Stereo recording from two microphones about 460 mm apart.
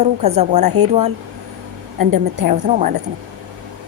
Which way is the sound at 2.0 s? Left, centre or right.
Right.